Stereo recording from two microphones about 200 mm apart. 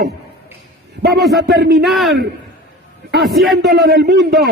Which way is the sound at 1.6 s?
60° right (ahead or behind).